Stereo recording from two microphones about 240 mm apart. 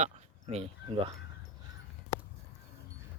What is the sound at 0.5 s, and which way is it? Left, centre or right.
Speech, right.